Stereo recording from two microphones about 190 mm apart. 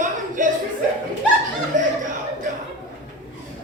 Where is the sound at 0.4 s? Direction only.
45° right (ahead or behind).